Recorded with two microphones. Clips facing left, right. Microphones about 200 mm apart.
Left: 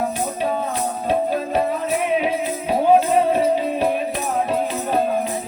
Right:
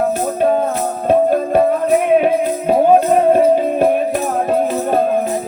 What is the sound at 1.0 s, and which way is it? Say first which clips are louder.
Music: right 9 dB; 55° right (ahead or behind).